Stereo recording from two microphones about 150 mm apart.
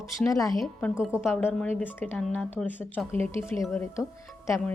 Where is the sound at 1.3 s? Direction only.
10° left (ahead or behind).